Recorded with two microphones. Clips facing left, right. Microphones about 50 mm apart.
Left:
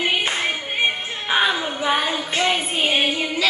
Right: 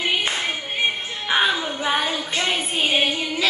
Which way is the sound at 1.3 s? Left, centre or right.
Centre.